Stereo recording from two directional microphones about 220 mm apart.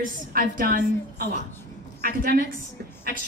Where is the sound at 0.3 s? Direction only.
40° right (ahead or behind).